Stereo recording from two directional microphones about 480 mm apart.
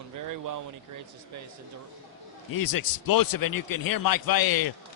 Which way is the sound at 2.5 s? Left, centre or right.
Left.